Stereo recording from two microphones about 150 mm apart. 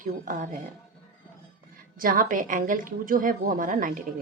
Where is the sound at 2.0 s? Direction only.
70° right (ahead or behind).